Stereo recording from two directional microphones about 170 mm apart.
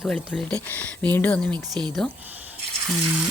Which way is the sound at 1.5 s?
25° right (ahead or behind).